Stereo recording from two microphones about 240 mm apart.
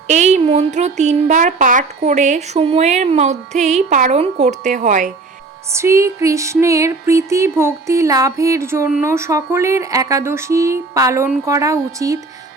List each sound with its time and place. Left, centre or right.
0.1 s speech: right
5.7 s music: centre